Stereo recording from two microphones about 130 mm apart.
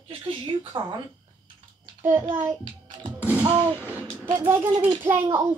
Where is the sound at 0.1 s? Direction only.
40° right (ahead or behind).